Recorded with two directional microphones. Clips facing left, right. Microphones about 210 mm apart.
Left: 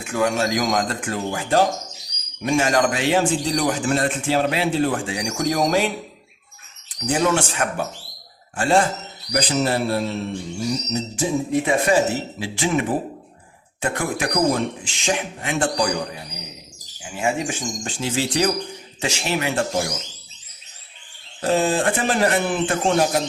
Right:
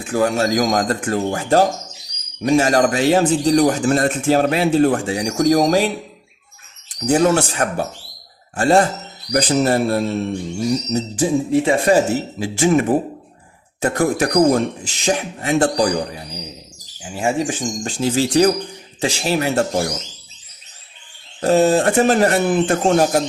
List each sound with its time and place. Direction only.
0.0 s speech: 35° right (ahead or behind)
10.9 s speech: 30° right (ahead or behind)
13.8 s speech: 40° right (ahead or behind)
17.0 s speech: 35° right (ahead or behind)
21.4 s speech: 40° right (ahead or behind)